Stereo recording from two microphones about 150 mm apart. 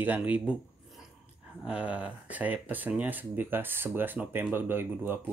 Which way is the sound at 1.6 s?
10° right (ahead or behind).